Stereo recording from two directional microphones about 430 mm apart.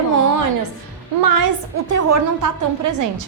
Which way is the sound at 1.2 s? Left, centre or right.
Right.